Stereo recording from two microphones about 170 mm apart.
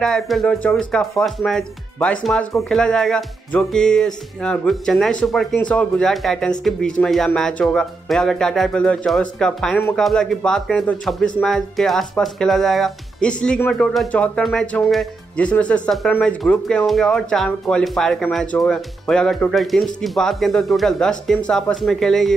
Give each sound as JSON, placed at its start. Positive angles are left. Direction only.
{"t": 0.0, "sound": "speech", "side_deg": 0}